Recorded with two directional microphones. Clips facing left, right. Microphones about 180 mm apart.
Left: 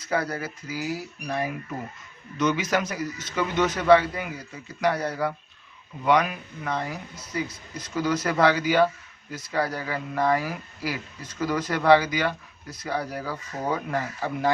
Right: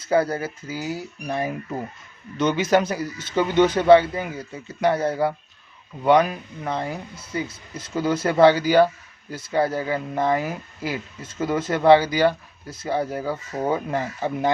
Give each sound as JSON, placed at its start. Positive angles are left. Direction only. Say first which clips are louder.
{"t": 0.1, "sound": "speech", "louder": "right 6 dB", "side_deg": -30}